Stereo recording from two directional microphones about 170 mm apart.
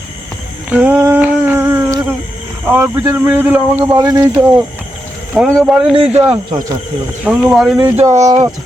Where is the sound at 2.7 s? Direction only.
10° right (ahead or behind).